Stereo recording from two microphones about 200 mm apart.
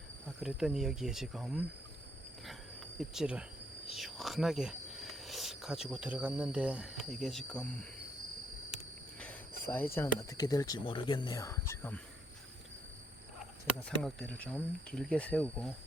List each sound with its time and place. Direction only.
0.4 s speech: 5° right (ahead or behind)
2.5 s cricket: centre (ahead or behind)
3.9 s speech: centre (ahead or behind)
9.1 s speech: 10° left (ahead or behind)
13.8 s speech: 5° left (ahead or behind)